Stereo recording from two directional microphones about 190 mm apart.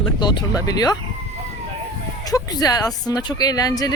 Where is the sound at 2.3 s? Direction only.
20° left (ahead or behind).